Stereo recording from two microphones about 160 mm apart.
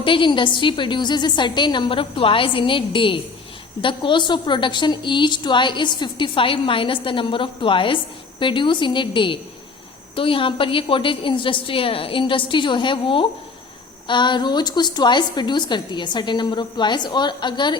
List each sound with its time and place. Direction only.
0.0 s a woman's voice: 30° left (ahead or behind)